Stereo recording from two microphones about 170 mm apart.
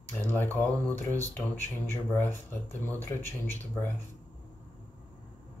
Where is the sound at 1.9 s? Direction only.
15° left (ahead or behind).